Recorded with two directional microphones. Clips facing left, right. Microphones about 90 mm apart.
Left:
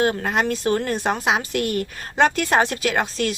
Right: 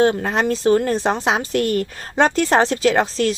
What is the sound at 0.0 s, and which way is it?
Speech, 30° right (ahead or behind).